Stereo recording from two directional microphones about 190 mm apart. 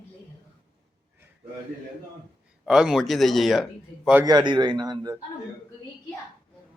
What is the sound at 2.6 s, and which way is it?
A man's voice, 5° right (ahead or behind).